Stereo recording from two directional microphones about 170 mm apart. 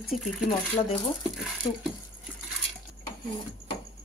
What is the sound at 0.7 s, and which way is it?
Speech, 30° left (ahead or behind).